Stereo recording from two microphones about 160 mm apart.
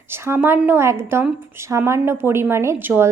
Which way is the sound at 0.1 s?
15° right (ahead or behind).